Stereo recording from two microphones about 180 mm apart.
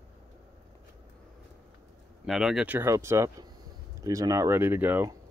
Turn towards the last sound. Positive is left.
turn(degrees=-10)  # may be behind; listen again after turning